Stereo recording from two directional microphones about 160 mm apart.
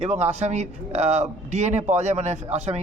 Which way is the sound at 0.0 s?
45° right (ahead or behind).